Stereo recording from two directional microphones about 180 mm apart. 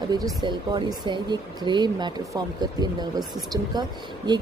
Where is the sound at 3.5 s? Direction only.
25° right (ahead or behind).